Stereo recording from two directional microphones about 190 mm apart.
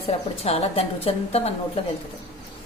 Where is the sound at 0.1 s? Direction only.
35° left (ahead or behind).